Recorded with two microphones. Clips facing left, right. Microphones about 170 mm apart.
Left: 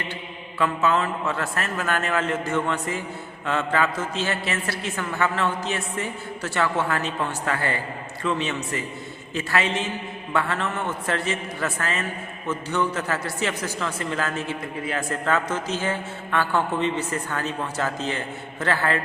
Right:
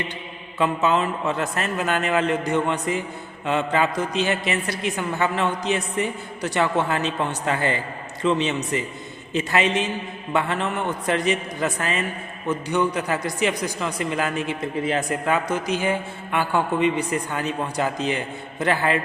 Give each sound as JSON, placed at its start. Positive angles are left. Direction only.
{"t": 0.6, "sound": "a man's voice", "side_deg": -20}